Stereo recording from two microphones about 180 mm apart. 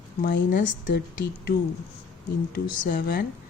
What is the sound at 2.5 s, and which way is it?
Speech, 60° left (ahead or behind).